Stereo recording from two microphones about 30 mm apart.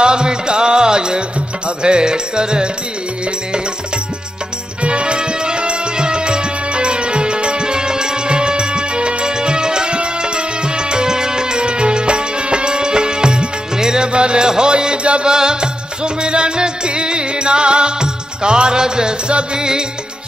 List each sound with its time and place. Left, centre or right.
0.0 s music: right
4.8 s music: right